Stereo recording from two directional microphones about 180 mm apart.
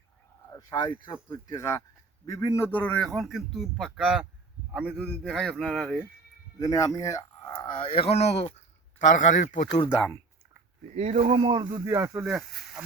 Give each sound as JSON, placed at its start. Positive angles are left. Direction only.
{"t": 0.5, "sound": "a man's voice", "side_deg": 20}
{"t": 6.6, "sound": "speech", "side_deg": 20}
{"t": 10.9, "sound": "speech", "side_deg": -40}
{"t": 11.7, "sound": "speech", "side_deg": -20}
{"t": 12.3, "sound": "speech", "side_deg": -5}